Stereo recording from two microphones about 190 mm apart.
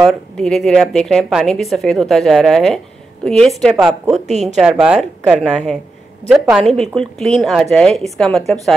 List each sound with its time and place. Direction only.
0.0 s a woman's voice: centre (ahead or behind)
4.1 s a woman's voice: 35° right (ahead or behind)
4.6 s a woman's voice: 5° right (ahead or behind)